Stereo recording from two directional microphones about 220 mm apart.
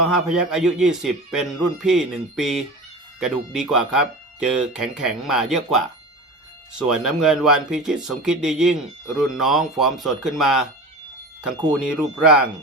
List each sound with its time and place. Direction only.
0.1 s speech: centre (ahead or behind)